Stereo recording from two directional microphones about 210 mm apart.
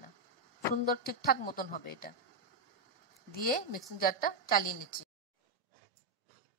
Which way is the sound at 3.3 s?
45° left (ahead or behind).